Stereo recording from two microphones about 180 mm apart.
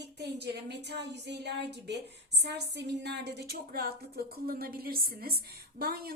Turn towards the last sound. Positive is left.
turn(degrees=-55)  # may be behind; listen again after turning